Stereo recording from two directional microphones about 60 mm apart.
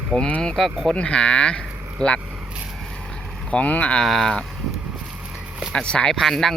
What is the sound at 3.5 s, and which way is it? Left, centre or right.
Speech, left.